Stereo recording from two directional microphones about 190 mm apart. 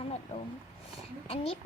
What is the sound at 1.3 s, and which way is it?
Speech, 30° left (ahead or behind).